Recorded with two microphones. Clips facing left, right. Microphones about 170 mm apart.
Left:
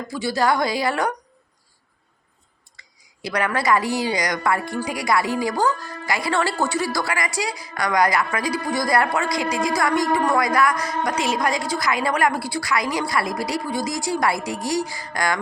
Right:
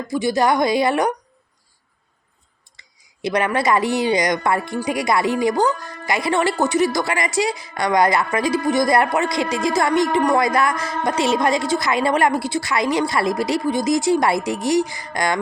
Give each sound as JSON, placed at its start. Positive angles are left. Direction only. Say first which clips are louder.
{"t": 0.1, "sound": "speech", "louder": "right 3 dB", "side_deg": -15}
{"t": 2.7, "sound": "speech", "louder": "left 2 dB", "side_deg": -20}